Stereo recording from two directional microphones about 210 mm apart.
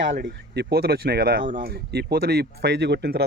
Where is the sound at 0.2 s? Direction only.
50° right (ahead or behind).